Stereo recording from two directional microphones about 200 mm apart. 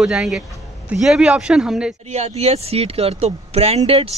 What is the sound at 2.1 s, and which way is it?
Speech, 30° right (ahead or behind).